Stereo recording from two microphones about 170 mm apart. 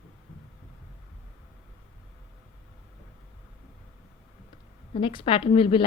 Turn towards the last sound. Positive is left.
turn(degrees=30)  # may be behind; listen again after turning